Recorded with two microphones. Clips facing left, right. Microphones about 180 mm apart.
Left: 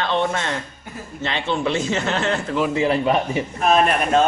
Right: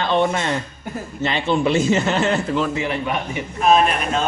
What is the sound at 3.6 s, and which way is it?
Speech, 50° left (ahead or behind).